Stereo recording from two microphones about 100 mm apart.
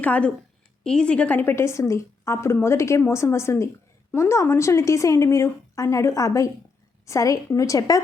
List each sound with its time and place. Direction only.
0.0 s a woman's voice: 15° left (ahead or behind); by 8.0 s 35° left (ahead or behind)